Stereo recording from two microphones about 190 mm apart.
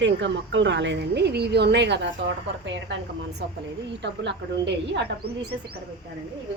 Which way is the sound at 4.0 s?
65° right (ahead or behind).